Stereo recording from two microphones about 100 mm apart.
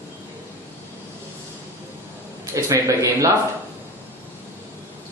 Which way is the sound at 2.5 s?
30° right (ahead or behind).